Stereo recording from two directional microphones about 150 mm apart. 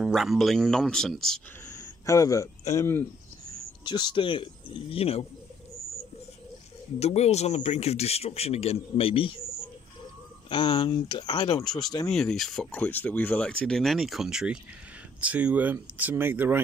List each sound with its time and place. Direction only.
0.0 s speech: centre (ahead or behind)
1.7 s speech: 20° left (ahead or behind)
3.8 s speech: 30° left (ahead or behind)
7.0 s speech: 45° left (ahead or behind)
10.5 s speech: 35° left (ahead or behind)
12.1 s speech: 5° left (ahead or behind); by 16.5 s 15° right (ahead or behind)